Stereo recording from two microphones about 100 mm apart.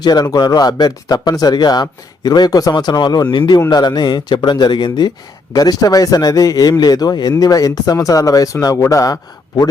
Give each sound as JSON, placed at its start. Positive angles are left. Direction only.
{"t": 0.0, "sound": "speech", "side_deg": 45}